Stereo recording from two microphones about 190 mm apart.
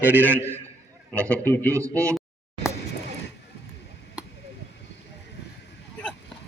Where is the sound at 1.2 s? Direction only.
10° left (ahead or behind).